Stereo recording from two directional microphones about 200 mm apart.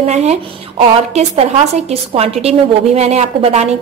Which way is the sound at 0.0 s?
30° right (ahead or behind).